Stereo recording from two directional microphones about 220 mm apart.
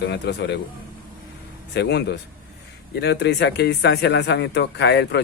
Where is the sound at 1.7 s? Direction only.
50° left (ahead or behind).